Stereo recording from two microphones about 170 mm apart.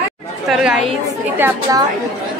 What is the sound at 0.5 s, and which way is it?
A woman's voice, 5° right (ahead or behind).